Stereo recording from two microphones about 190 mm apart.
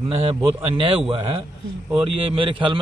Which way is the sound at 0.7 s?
30° right (ahead or behind).